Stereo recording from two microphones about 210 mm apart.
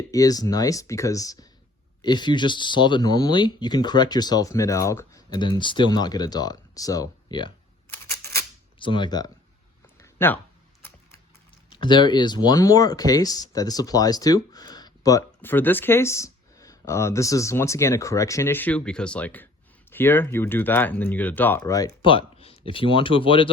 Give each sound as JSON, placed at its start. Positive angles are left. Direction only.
{"t": 0.1, "sound": "speech", "side_deg": 15}
{"t": 8.8, "sound": "speech", "side_deg": 20}
{"t": 10.0, "sound": "a sound", "side_deg": 10}
{"t": 11.7, "sound": "speech", "side_deg": 20}